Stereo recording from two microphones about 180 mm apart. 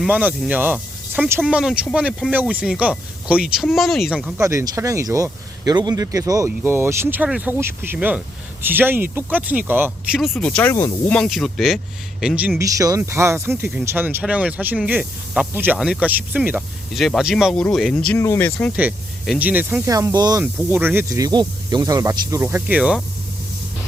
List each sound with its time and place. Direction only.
0.0 s speech: 10° right (ahead or behind)
4.4 s speech: 15° right (ahead or behind)
10.2 s speech: centre (ahead or behind)
12.6 s speech: 20° right (ahead or behind); by 18.7 s 10° left (ahead or behind)
18.8 s speech: 5° right (ahead or behind)